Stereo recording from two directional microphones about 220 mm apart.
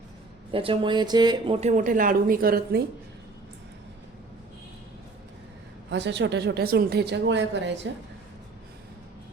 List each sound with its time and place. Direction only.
0.5 s speech: 25° right (ahead or behind); by 2.8 s 40° right (ahead or behind)
5.9 s a woman's voice: 50° right (ahead or behind)